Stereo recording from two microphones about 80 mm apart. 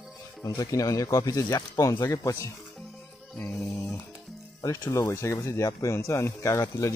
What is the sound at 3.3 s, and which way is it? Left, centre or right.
Music, centre.